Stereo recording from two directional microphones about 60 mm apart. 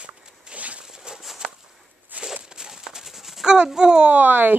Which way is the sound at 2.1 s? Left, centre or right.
Right.